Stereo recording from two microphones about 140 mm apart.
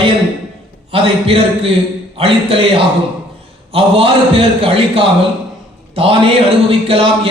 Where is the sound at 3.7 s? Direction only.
40° right (ahead or behind).